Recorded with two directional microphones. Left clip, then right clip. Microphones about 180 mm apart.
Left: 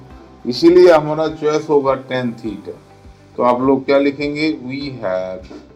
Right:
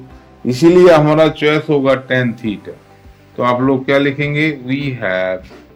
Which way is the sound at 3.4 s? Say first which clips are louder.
Even; 50° right (ahead or behind).